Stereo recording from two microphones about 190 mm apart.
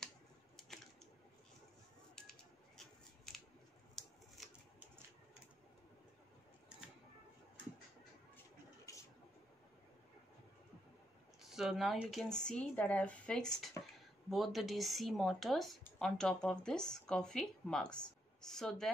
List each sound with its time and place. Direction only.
3.3 s scissors: 5° left (ahead or behind)
3.9 s typewriter: centre (ahead or behind)
8.9 s a sound: 15° left (ahead or behind)
11.4 s speech: centre (ahead or behind)